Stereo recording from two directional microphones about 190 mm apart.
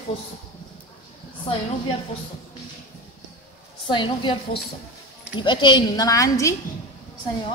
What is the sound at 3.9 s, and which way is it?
Speech, 25° left (ahead or behind).